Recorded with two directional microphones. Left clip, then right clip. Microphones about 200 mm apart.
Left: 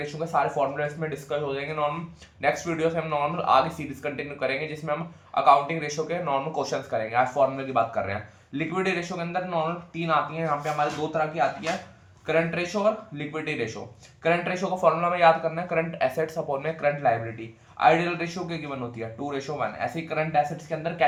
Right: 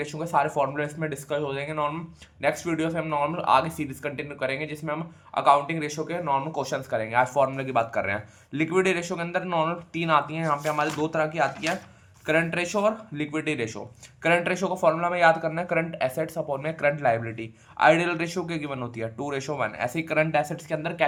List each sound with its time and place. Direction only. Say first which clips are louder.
0.0 s speech: right 1 dB; 25° right (ahead or behind)